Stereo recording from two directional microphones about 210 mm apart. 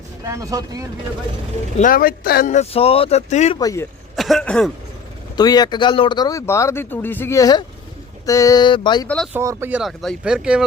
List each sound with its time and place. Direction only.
0.3 s speech: 15° right (ahead or behind)
1.8 s speech: 45° left (ahead or behind)
3.6 s speech: 15° left (ahead or behind)
4.1 s speech: centre (ahead or behind)
5.4 s speech: 20° left (ahead or behind)
9.0 s speech: 5° left (ahead or behind)
9.3 s speech: 10° right (ahead or behind)